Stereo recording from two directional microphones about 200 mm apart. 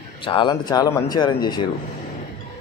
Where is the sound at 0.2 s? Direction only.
25° left (ahead or behind).